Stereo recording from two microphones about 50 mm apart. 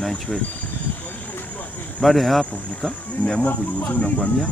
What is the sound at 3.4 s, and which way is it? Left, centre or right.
Speech, left.